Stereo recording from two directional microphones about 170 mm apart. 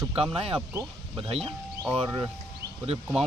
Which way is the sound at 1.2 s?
35° right (ahead or behind).